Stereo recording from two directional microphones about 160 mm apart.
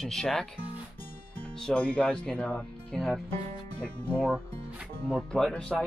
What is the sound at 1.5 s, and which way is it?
Speech, 5° left (ahead or behind).